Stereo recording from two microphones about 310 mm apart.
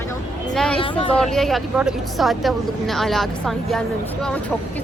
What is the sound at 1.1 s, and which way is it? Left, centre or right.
Speech, centre.